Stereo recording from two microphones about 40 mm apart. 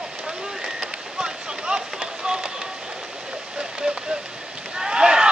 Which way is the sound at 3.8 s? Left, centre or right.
Right.